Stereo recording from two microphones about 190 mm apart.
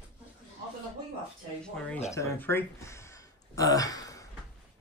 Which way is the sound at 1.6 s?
5° left (ahead or behind).